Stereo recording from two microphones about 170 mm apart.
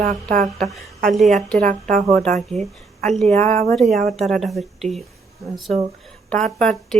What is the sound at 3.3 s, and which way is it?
Speech, 10° left (ahead or behind).